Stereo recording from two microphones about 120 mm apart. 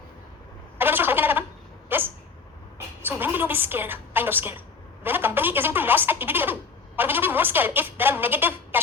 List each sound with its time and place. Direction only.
0.8 s a sound: 15° right (ahead or behind)
1.9 s dog: 15° right (ahead or behind)
3.1 s a woman's voice: 15° right (ahead or behind)